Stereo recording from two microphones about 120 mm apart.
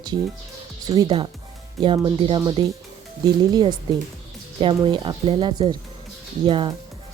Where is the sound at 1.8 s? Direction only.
35° right (ahead or behind).